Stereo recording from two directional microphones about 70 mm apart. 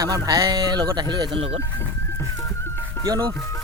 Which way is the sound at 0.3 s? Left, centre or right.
Right.